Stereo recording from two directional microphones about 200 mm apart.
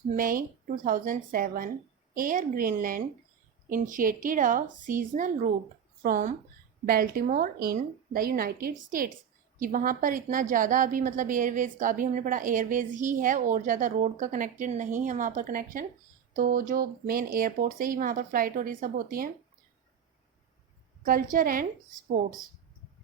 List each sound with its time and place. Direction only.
0.2 s a woman's voice: 45° right (ahead or behind)
21.0 s speech: 45° right (ahead or behind)